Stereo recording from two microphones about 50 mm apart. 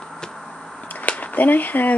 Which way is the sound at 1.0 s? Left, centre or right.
Left.